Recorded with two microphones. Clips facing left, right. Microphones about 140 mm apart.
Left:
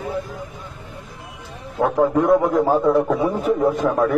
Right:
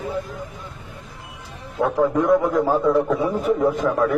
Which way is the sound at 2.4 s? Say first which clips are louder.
Left 2 dB; 15° left (ahead or behind).